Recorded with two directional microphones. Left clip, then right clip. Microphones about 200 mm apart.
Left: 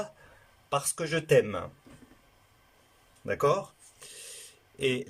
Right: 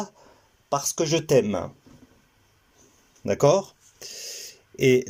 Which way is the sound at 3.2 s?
25° right (ahead or behind).